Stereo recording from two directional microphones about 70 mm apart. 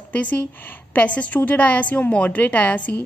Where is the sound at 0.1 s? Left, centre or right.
Left.